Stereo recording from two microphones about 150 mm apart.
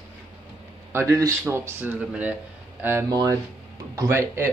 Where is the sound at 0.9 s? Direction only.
20° right (ahead or behind).